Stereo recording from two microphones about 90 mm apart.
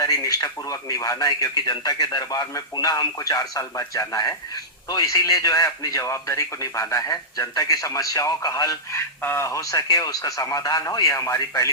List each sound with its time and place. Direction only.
0.0 s a man's voice: 40° left (ahead or behind)